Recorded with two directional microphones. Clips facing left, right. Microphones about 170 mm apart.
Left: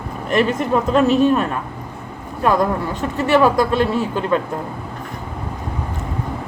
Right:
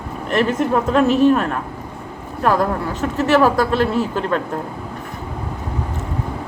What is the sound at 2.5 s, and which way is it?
Speech, 5° right (ahead or behind).